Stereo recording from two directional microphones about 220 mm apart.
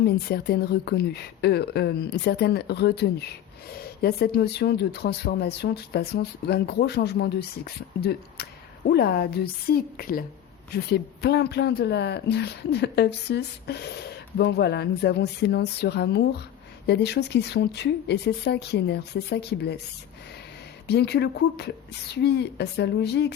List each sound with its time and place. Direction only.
0.0 s speech: 45° left (ahead or behind)
20.8 s speech: 50° left (ahead or behind)